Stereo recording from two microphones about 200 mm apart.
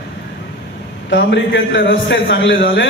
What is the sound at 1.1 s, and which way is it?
A man's voice, 60° left (ahead or behind).